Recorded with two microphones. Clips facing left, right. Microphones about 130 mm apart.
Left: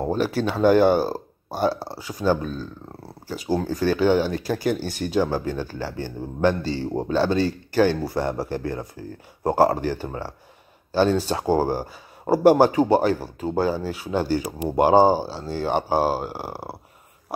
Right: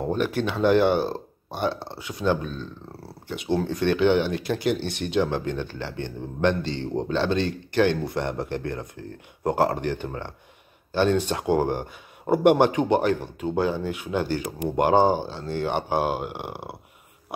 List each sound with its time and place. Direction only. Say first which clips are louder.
0.0 s speech: left 2 dB; 5° left (ahead or behind)
15.9 s speech: left 4 dB; 40° left (ahead or behind)
16.3 s speech: left 2 dB; 5° left (ahead or behind)